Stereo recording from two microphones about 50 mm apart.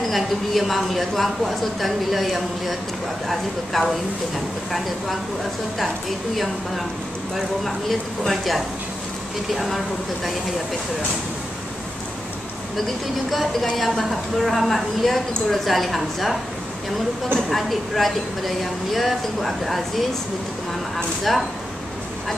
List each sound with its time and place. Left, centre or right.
0.1 s speech: centre
8.3 s speech: centre
12.7 s speech: centre
17.5 s speech: centre
21.2 s speech: centre